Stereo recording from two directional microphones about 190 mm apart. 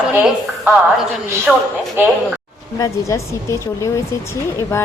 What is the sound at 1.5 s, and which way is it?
Speech, centre (ahead or behind).